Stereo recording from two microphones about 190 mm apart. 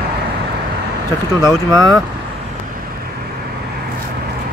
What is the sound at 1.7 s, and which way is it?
Speech, 20° right (ahead or behind).